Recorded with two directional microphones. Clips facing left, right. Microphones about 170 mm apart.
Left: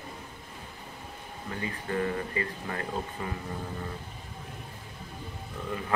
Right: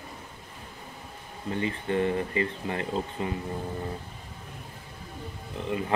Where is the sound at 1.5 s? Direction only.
25° right (ahead or behind).